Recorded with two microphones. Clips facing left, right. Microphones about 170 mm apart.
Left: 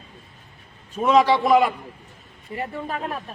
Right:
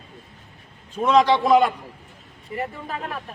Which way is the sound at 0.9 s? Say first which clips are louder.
Even; 10° left (ahead or behind).